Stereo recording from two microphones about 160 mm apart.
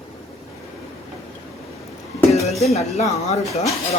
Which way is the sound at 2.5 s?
40° left (ahead or behind).